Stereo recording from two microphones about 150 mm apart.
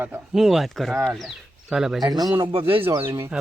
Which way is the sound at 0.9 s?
15° right (ahead or behind).